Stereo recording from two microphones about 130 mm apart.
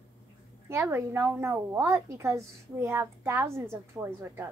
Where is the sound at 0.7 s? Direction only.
20° right (ahead or behind).